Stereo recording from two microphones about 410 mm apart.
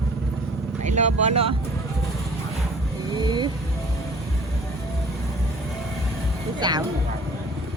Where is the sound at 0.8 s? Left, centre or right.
Centre.